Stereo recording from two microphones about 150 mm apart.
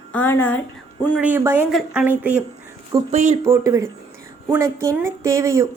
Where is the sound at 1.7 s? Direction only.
Centre (ahead or behind).